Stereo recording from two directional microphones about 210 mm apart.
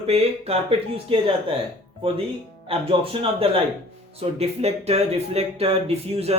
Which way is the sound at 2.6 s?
25° right (ahead or behind).